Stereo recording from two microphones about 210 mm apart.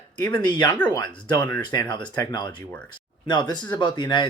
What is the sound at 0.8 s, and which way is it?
Speech, 10° left (ahead or behind).